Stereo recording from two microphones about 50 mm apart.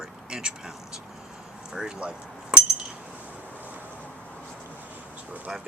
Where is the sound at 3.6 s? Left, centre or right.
Right.